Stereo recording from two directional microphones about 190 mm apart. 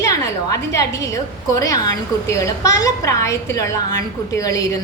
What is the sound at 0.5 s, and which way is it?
A woman's voice, 15° left (ahead or behind).